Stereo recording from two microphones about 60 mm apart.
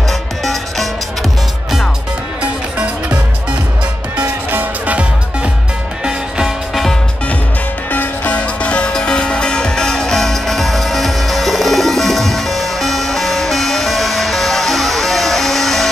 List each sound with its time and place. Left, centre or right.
4.2 s music: right
6.0 s music: centre
6.7 s music: centre
7.9 s music: left
8.4 s music: centre